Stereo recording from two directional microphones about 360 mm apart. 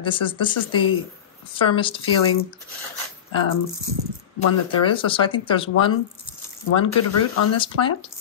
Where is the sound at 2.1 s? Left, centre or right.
Left.